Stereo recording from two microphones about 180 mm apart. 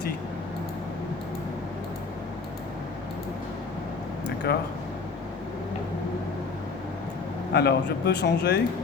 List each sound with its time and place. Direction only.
4.5 s speech: 60° left (ahead or behind)
7.5 s speech: 65° left (ahead or behind)